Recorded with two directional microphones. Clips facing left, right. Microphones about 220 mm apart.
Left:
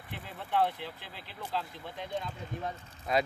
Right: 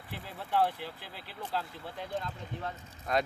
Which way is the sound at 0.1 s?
5° right (ahead or behind).